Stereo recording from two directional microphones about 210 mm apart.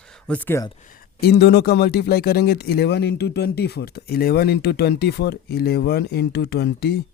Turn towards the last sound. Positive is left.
turn(degrees=50)  # may be behind; listen again after turning